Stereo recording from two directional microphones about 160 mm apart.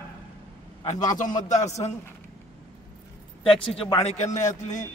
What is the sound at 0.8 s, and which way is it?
A man's voice, 50° left (ahead or behind).